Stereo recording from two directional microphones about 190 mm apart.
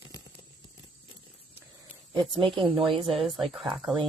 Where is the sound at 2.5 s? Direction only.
25° right (ahead or behind).